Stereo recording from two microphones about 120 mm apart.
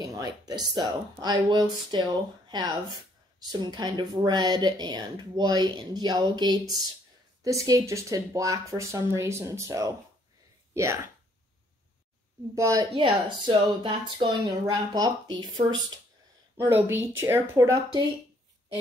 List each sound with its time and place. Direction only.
0.0 s speech: 30° right (ahead or behind)
7.6 s speech: 25° right (ahead or behind)
12.5 s speech: 25° right (ahead or behind)
12.9 s speech: 45° right (ahead or behind)
16.5 s speech: 20° right (ahead or behind)